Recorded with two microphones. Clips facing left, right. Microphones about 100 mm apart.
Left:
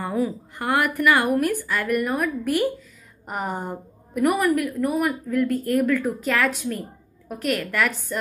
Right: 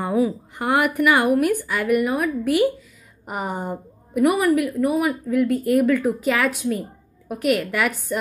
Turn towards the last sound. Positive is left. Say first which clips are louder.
# right 3 dB
turn(degrees=-15)  # may be behind; listen again after turning